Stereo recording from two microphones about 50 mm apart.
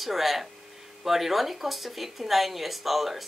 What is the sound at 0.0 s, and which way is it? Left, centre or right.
A woman's voice, centre.